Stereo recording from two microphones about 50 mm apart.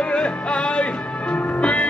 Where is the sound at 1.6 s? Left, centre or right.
Left.